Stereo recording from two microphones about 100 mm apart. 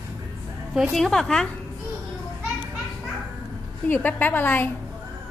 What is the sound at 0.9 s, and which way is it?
Speech, 5° left (ahead or behind).